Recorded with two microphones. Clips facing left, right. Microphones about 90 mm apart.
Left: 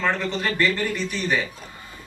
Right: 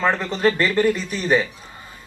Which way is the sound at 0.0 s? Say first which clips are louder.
Right 5 dB; 35° right (ahead or behind).